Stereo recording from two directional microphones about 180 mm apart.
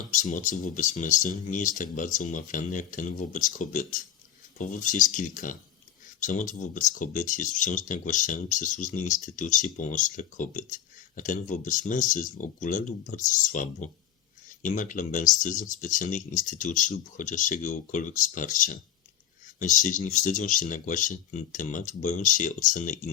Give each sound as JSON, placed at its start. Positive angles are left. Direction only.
{"t": 0.1, "sound": "speech", "side_deg": 45}